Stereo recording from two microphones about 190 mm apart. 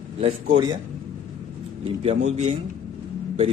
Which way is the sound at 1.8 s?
30° right (ahead or behind).